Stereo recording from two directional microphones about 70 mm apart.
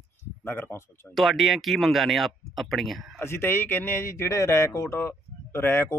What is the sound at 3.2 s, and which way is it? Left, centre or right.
Speech, left.